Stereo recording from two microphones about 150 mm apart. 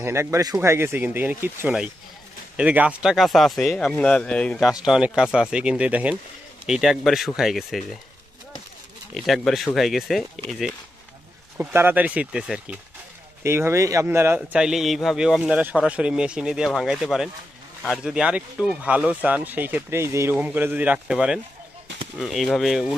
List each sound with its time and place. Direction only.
0.0 s a man's voice: 15° right (ahead or behind); by 8.0 s centre (ahead or behind)
9.1 s a man's voice: centre (ahead or behind)
11.5 s speech: 10° right (ahead or behind)
13.4 s a man's voice: 15° right (ahead or behind)